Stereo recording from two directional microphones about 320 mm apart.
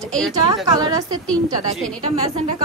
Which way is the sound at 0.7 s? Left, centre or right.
Centre.